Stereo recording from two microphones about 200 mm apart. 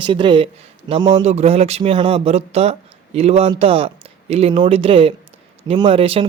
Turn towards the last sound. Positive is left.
turn(degrees=-30)  # may be behind; listen again after turning